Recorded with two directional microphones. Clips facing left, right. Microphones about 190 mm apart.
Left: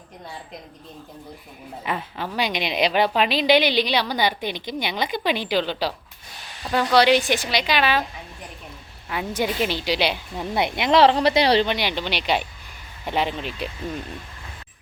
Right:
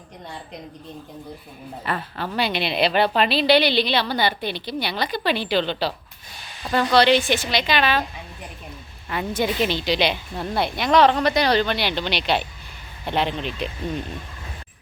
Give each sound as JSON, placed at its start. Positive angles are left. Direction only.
{"t": 1.8, "sound": "a woman's voice", "side_deg": 15}
{"t": 9.0, "sound": "a woman's voice", "side_deg": 10}
{"t": 10.5, "sound": "speech", "side_deg": 20}
{"t": 11.7, "sound": "a woman's voice", "side_deg": 15}